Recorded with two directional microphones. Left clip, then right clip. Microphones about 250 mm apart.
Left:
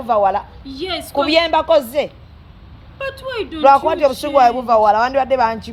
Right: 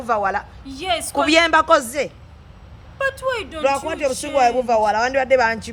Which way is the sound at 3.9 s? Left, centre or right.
Centre.